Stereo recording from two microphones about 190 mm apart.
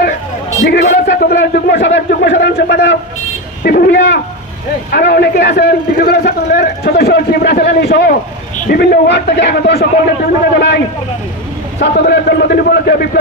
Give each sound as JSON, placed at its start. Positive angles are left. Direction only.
{"t": 0.6, "sound": "a man's voice", "side_deg": 60}
{"t": 11.8, "sound": "a man's voice", "side_deg": 60}